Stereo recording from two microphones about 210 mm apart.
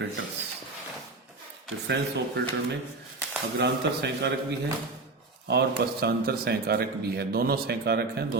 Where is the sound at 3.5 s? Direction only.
55° right (ahead or behind).